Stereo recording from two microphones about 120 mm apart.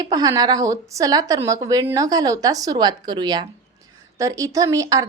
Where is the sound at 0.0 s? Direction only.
30° right (ahead or behind).